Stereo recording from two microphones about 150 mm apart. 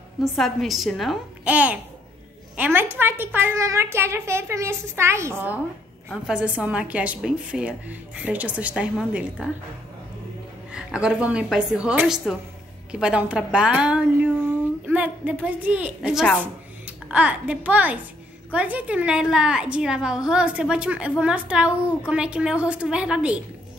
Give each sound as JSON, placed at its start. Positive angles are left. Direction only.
{"t": 0.2, "sound": "a child's voice", "side_deg": 0}
{"t": 6.0, "sound": "a woman's voice", "side_deg": -5}
{"t": 10.7, "sound": "a woman's voice", "side_deg": -5}